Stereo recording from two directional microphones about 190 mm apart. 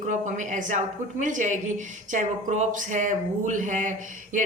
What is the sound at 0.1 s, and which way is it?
A woman's voice, 40° right (ahead or behind).